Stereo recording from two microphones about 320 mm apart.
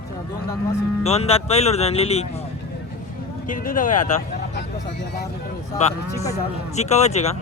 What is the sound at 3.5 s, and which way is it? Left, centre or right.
Speech, left.